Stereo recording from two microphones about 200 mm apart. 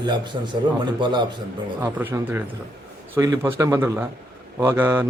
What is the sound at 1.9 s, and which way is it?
Speech, 10° right (ahead or behind).